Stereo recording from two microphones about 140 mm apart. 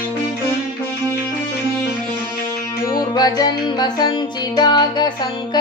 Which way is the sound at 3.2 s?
30° left (ahead or behind).